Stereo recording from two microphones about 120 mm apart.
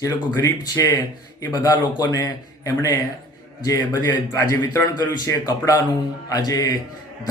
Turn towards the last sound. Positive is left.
turn(degrees=30)  # may be behind; listen again after turning